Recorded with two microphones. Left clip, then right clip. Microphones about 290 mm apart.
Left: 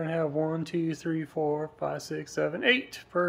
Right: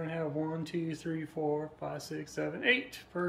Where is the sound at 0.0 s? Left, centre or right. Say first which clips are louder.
Left 7 dB; centre.